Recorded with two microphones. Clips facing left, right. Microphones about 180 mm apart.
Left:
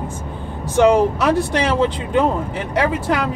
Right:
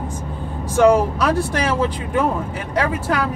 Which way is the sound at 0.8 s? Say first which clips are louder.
Left 1 dB; 25° left (ahead or behind).